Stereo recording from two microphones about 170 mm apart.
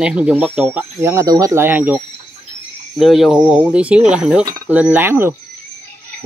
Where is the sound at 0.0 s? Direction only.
5° right (ahead or behind).